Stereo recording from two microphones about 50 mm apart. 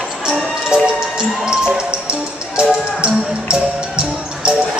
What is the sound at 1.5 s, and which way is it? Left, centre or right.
Music, centre.